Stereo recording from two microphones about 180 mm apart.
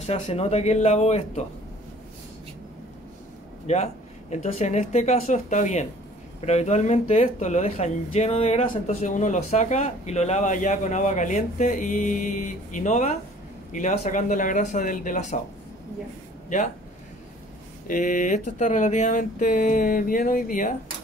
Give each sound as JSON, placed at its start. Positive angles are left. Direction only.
{"t": 0.0, "sound": "speech", "side_deg": 35}
{"t": 3.6, "sound": "speech", "side_deg": 40}
{"t": 16.4, "sound": "speech", "side_deg": 45}
{"t": 17.8, "sound": "speech", "side_deg": 50}